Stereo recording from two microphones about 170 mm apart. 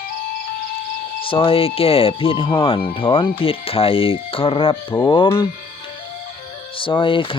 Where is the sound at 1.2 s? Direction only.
30° left (ahead or behind).